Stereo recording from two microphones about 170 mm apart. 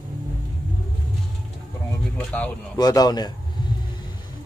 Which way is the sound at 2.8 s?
25° left (ahead or behind).